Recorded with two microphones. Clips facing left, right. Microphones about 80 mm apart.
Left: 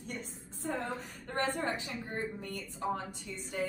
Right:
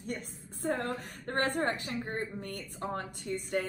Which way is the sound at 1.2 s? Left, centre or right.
Right.